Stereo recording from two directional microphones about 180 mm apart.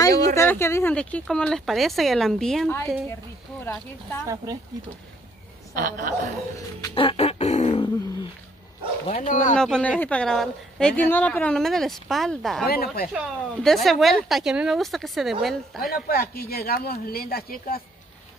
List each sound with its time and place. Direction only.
0.0 s a sound: 20° left (ahead or behind)
0.4 s a woman's voice: 15° left (ahead or behind)
5.8 s a woman's voice: 50° right (ahead or behind)
7.0 s a sound: 35° left (ahead or behind)
9.0 s speech: 35° left (ahead or behind)
9.6 s a woman's voice: 5° left (ahead or behind)
12.6 s speech: 60° left (ahead or behind)
13.1 s a woman's voice: centre (ahead or behind)
15.9 s speech: 55° left (ahead or behind)